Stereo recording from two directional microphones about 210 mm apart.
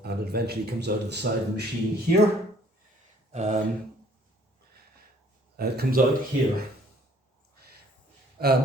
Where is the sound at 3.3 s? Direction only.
35° right (ahead or behind).